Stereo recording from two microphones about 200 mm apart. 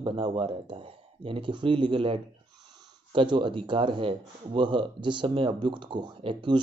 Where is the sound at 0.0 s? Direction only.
25° right (ahead or behind).